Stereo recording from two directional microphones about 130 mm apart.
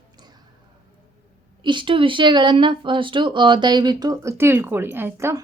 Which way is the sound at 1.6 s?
40° right (ahead or behind).